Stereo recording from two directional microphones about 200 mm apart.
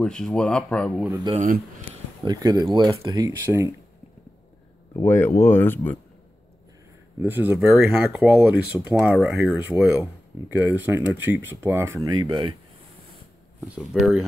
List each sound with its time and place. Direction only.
0.0 s speech: 5° left (ahead or behind)
1.3 s speech: 40° right (ahead or behind)
2.2 s speech: 20° right (ahead or behind)
4.9 s speech: 10° left (ahead or behind)
7.2 s speech: 10° right (ahead or behind)
13.7 s speech: centre (ahead or behind)